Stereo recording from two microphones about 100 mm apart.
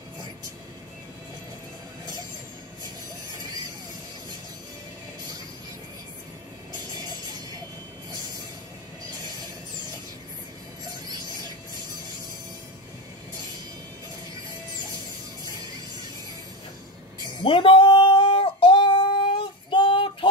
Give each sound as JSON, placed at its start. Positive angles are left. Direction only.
{"t": 7.0, "sound": "music", "side_deg": -40}
{"t": 17.4, "sound": "female singing", "side_deg": 60}